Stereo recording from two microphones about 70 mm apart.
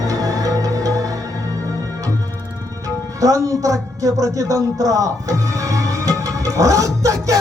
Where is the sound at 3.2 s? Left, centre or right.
Right.